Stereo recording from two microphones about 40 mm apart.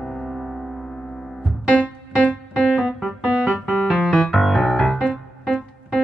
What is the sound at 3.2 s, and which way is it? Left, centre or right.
Music, centre.